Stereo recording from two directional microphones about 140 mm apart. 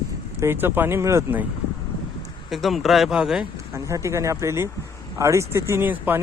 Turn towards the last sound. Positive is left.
turn(degrees=-15)  # may be behind; listen again after turning